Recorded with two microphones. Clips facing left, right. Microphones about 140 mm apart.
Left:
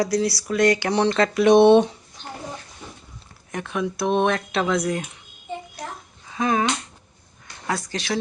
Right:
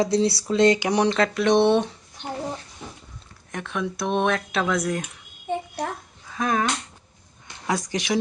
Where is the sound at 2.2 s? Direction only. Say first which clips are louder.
Right 5 dB; 20° right (ahead or behind).